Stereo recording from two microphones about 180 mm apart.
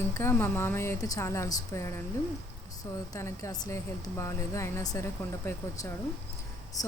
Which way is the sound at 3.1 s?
15° left (ahead or behind).